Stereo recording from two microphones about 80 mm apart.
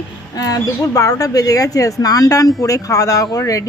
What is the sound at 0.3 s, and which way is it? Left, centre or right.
Speech, left.